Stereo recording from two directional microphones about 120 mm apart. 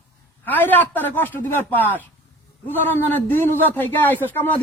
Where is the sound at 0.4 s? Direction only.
15° left (ahead or behind).